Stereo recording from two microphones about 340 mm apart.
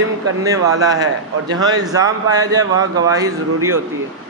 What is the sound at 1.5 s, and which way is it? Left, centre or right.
Speech, centre.